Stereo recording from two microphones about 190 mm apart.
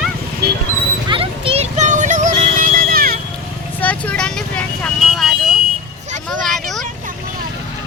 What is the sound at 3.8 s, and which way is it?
Vehicle, 5° left (ahead or behind).